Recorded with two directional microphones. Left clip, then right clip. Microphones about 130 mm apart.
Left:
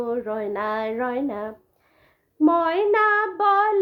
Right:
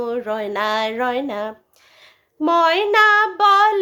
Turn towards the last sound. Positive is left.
turn(degrees=-15)  # may be behind; listen again after turning